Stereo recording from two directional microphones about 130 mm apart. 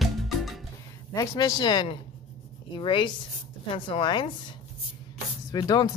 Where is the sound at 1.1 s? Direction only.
25° left (ahead or behind).